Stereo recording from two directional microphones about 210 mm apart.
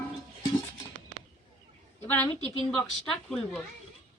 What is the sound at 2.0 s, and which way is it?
A woman's voice, 10° left (ahead or behind).